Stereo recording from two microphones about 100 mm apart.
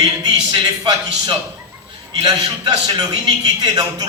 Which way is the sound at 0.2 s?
45° right (ahead or behind).